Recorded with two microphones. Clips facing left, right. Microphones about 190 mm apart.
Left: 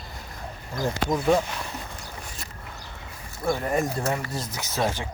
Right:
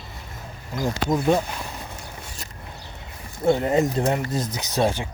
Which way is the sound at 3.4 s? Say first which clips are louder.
Right 5 dB; 20° right (ahead or behind).